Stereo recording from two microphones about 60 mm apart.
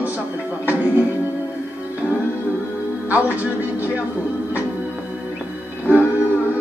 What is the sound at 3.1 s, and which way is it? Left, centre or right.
Speech, right.